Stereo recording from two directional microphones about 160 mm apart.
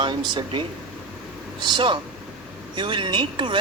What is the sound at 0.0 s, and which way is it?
Speech, 30° right (ahead or behind).